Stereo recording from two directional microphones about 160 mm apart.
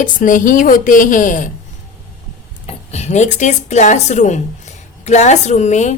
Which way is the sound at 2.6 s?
45° left (ahead or behind).